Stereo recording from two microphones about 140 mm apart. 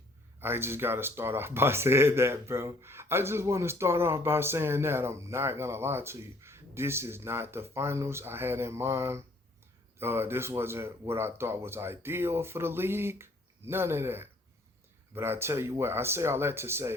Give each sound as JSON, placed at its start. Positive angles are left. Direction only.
{"t": 0.3, "sound": "speech", "side_deg": -15}